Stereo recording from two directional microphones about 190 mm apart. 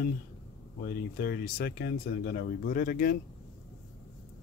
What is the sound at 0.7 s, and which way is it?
Speech, 50° left (ahead or behind).